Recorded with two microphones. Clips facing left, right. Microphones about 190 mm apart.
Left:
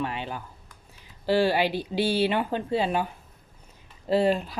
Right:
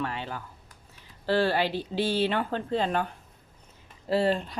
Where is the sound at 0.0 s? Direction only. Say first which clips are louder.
Left 2 dB; 15° left (ahead or behind).